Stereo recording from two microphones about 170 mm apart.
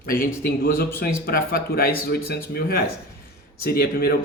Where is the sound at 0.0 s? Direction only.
60° left (ahead or behind).